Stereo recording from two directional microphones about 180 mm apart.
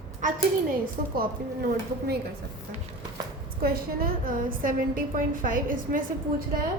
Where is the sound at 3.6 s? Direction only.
55° right (ahead or behind).